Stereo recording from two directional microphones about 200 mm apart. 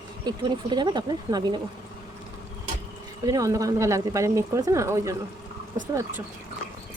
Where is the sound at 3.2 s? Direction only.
15° right (ahead or behind).